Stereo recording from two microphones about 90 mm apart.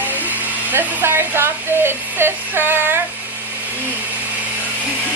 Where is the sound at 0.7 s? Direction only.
25° right (ahead or behind).